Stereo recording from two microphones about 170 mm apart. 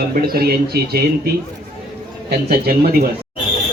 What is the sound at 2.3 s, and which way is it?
Speech, 65° right (ahead or behind).